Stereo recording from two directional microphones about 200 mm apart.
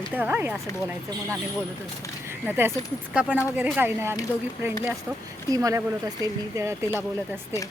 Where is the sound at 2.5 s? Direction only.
10° right (ahead or behind).